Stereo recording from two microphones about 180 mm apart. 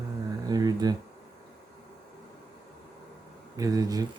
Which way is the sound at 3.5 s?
20° right (ahead or behind).